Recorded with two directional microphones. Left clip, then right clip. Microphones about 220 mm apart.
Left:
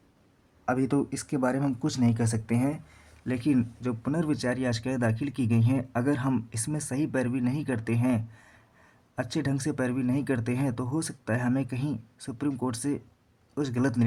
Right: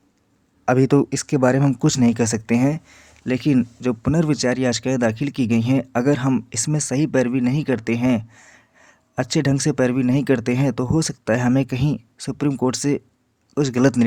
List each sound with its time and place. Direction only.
0.6 s speech: 40° right (ahead or behind)